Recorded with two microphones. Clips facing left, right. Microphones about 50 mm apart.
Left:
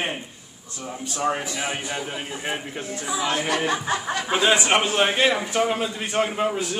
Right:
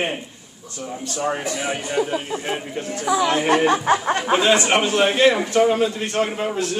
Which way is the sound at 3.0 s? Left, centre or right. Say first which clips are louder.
Right 7 dB; right.